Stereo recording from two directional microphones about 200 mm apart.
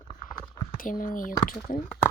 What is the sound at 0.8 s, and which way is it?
Speech, 45° left (ahead or behind).